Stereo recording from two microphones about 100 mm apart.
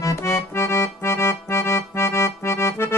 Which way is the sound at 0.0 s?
30° left (ahead or behind).